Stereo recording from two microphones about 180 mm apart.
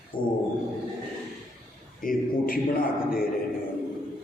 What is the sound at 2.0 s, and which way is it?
Speech, 50° left (ahead or behind).